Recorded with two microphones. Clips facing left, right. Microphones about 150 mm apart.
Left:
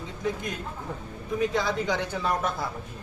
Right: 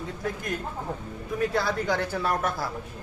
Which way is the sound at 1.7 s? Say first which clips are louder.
Right 1 dB; 15° left (ahead or behind).